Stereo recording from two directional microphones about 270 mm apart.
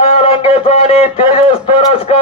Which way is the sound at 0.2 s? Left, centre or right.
Centre.